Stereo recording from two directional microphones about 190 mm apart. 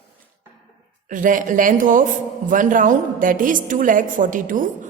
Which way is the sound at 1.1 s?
45° right (ahead or behind).